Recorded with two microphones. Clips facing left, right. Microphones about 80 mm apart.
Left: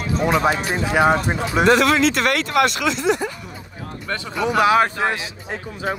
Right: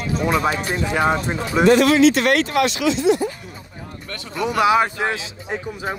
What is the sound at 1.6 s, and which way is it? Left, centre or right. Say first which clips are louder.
Speech: right 3 dB; left.